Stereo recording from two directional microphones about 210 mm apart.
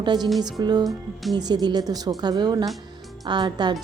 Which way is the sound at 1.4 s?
20° right (ahead or behind).